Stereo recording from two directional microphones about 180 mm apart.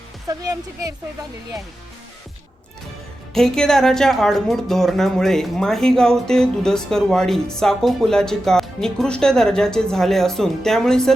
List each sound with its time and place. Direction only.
0.3 s speech: 20° right (ahead or behind)
3.3 s a woman's voice: 5° left (ahead or behind)